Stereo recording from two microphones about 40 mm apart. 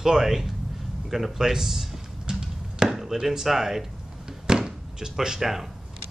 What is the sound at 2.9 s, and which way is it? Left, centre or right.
Chop, centre.